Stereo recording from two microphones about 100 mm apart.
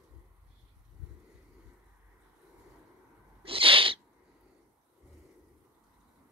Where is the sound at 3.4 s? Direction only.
65° right (ahead or behind).